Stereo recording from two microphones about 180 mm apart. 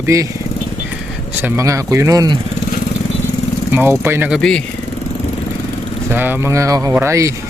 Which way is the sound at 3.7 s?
10° right (ahead or behind).